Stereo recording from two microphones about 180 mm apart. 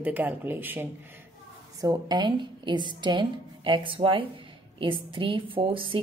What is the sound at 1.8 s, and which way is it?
A woman's voice, 20° right (ahead or behind).